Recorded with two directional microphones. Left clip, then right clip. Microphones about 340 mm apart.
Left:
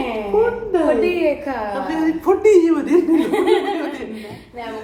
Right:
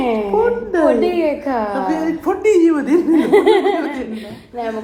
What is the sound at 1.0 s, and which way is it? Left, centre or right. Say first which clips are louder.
Speech: right 1 dB; right.